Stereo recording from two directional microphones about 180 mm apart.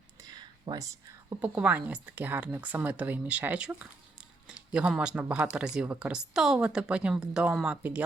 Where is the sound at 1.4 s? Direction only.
10° right (ahead or behind).